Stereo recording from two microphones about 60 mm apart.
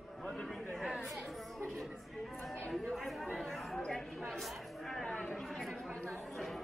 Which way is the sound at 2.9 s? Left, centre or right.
Centre.